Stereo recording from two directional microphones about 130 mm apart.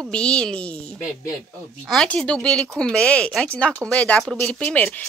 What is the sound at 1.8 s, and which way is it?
Speech, 5° left (ahead or behind).